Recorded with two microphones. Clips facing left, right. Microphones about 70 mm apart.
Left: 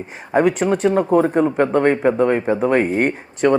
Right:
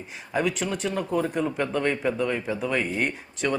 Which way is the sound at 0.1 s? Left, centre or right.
Left.